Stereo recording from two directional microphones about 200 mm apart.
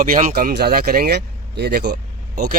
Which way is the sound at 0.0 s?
45° right (ahead or behind).